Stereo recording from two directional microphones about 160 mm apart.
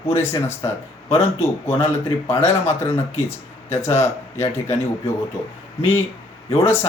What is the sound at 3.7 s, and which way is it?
Speech, 15° left (ahead or behind).